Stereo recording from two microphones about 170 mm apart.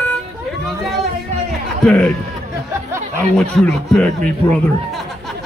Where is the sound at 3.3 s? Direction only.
5° left (ahead or behind).